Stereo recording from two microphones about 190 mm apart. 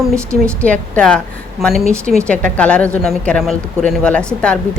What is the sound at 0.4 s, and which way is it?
A woman's voice, 5° left (ahead or behind).